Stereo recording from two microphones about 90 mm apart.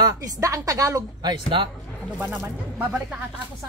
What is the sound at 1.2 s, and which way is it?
Speech, 65° right (ahead or behind).